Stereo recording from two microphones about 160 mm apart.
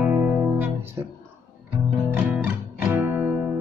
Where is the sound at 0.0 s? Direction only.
10° right (ahead or behind).